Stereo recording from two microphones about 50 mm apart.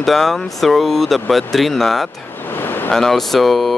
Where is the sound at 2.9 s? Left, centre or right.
Centre.